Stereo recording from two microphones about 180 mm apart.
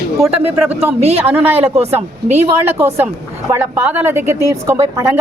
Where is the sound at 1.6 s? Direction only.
35° right (ahead or behind).